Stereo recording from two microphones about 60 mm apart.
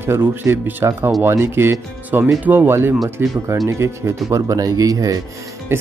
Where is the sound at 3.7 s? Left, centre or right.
Right.